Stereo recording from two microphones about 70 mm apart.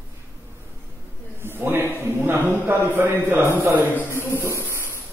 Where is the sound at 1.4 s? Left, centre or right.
Right.